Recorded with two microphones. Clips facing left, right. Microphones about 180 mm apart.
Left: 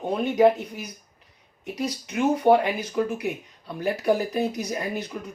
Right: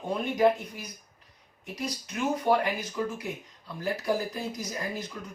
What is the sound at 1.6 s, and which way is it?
Speech, 65° left (ahead or behind).